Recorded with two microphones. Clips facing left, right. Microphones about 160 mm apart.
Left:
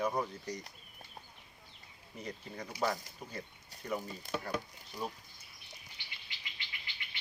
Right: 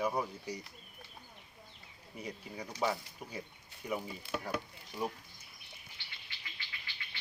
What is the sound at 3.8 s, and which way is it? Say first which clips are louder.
Speech: even; 10° right (ahead or behind).